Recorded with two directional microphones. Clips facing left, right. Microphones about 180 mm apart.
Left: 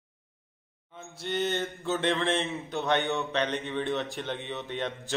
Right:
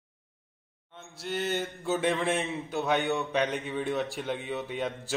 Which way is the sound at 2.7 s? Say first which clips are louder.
Even; centre (ahead or behind).